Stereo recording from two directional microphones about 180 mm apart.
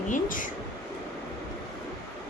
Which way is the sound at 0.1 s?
50° left (ahead or behind).